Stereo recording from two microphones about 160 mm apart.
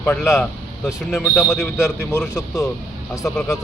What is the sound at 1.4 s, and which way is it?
Speech, 10° left (ahead or behind).